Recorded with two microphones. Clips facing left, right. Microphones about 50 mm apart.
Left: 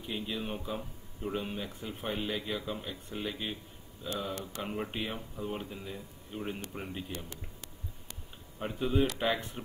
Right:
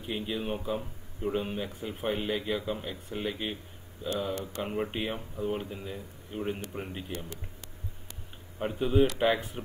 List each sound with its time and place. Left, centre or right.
0.0 s speech: centre
8.5 s speech: centre